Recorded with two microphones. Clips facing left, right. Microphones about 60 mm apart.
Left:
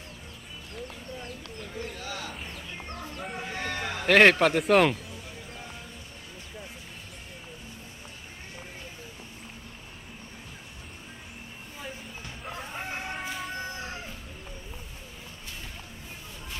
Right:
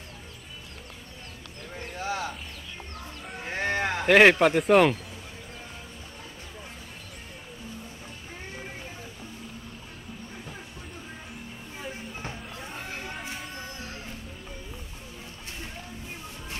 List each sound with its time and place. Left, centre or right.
2.0 s a sound: right
3.4 s a sound: right
4.1 s speech: centre
12.7 s music: left
13.1 s music: centre
13.6 s music: left